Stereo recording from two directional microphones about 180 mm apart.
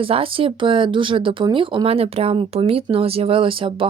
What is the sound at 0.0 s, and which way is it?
Speech, 30° right (ahead or behind).